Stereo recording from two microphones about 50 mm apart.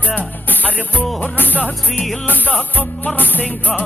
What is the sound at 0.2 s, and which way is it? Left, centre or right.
Music, left.